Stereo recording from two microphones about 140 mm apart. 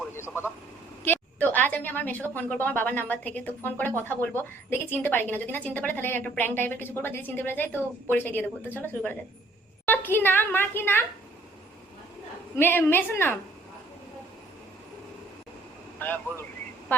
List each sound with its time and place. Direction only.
1.0 s a woman's voice: 15° left (ahead or behind)
12.5 s a woman's voice: 15° left (ahead or behind)
16.0 s speech: 15° left (ahead or behind)